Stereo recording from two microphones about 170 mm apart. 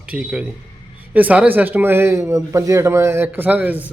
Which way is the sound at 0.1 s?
5° right (ahead or behind).